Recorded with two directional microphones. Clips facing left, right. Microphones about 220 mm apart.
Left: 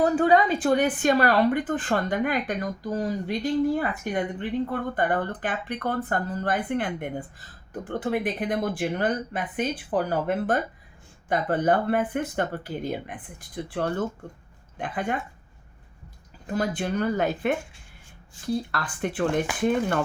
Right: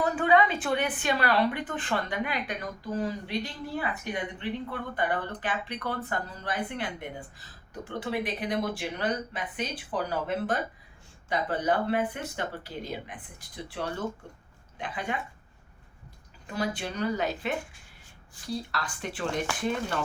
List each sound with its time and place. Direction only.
0.0 s speech: 40° left (ahead or behind)
16.5 s speech: 50° left (ahead or behind)